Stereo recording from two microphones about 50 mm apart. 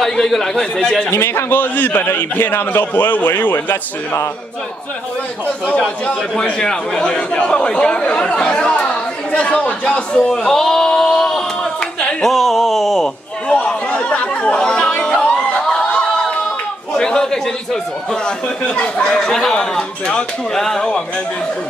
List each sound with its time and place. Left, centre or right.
0.0 s speech: centre
1.1 s a man's voice: left
5.8 s speech: centre
12.2 s a sound: centre
13.5 s chatter: left
16.9 s a sound: centre
18.8 s speech: centre